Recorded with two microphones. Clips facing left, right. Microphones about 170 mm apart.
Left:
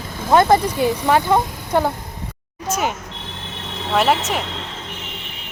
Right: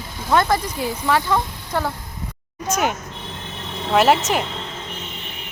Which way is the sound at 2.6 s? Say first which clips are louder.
Right 1 dB; centre (ahead or behind).